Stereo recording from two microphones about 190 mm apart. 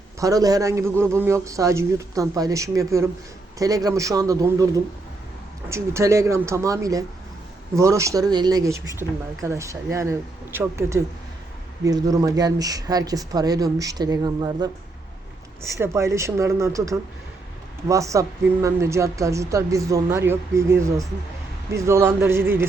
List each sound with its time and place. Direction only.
0.2 s speech: 20° right (ahead or behind)